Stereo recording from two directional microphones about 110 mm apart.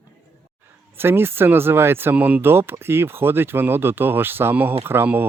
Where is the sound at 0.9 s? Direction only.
20° right (ahead or behind).